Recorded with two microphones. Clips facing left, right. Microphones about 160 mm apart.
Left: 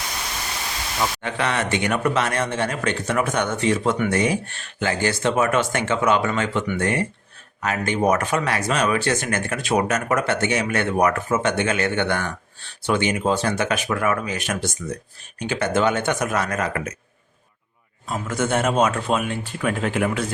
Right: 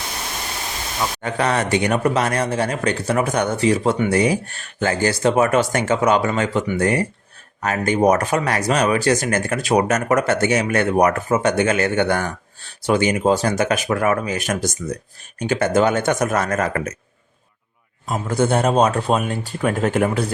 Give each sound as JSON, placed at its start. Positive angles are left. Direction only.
{"t": 1.2, "sound": "speech", "side_deg": -40}
{"t": 18.0, "sound": "speech", "side_deg": -35}